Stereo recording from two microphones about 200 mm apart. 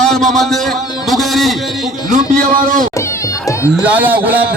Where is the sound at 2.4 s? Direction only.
40° right (ahead or behind).